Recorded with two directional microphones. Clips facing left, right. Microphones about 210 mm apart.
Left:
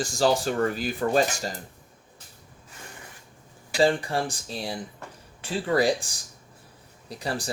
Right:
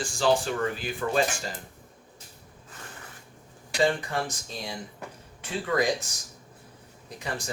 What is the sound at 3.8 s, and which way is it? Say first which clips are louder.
Speech: left 3 dB; 30° left (ahead or behind).